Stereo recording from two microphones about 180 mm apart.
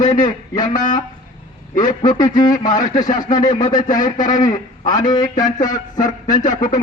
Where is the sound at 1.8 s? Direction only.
20° left (ahead or behind).